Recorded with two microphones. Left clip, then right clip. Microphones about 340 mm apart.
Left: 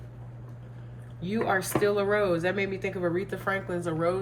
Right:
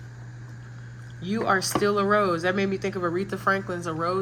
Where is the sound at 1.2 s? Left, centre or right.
Centre.